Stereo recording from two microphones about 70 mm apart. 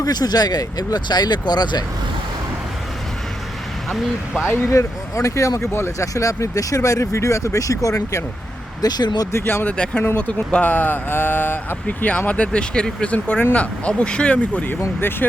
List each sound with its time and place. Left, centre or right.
0.0 s speech: left
4.7 s speech: left
8.8 s speech: left
9.3 s speech: left
9.6 s speech: centre
14.8 s speech: left